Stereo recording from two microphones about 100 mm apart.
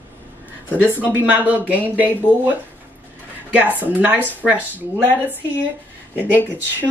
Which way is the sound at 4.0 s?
15° right (ahead or behind).